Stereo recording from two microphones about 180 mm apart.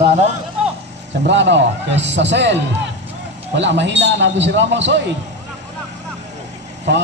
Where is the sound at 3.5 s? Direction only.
80° right.